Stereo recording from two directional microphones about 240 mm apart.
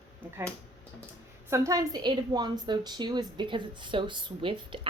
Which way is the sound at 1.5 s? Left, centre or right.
Centre.